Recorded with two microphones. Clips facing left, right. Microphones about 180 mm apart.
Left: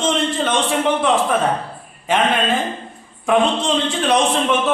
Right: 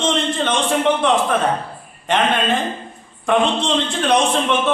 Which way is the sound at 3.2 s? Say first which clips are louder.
Left 1 dB; 5° left (ahead or behind).